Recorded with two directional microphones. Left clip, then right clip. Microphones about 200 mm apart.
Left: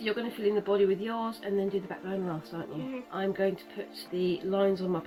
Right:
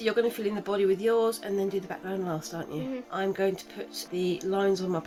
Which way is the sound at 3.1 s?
50° right (ahead or behind).